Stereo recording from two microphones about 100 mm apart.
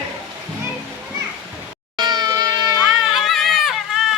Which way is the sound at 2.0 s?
45° right (ahead or behind).